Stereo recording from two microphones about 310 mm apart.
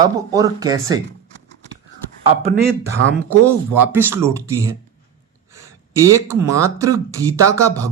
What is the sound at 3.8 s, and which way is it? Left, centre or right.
Speech, centre.